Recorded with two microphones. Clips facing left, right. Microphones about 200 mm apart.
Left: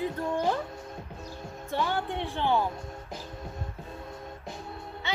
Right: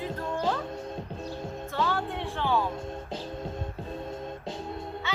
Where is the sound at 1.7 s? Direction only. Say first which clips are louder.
Left 1 dB; 15° left (ahead or behind).